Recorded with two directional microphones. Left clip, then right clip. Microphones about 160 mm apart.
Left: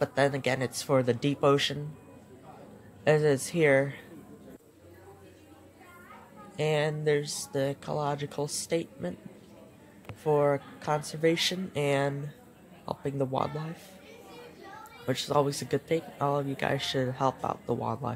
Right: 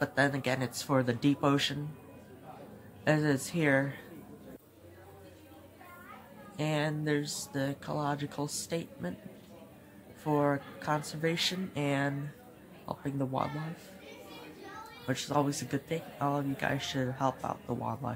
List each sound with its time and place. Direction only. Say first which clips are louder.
0.0 s speech: left 3 dB; 15° left (ahead or behind)
3.0 s speech: left 5 dB; 15° left (ahead or behind)
6.5 s speech: left 5 dB; 15° left (ahead or behind)
10.2 s speech: left 4 dB; 10° left (ahead or behind)
15.0 s speech: left 4 dB; 20° left (ahead or behind)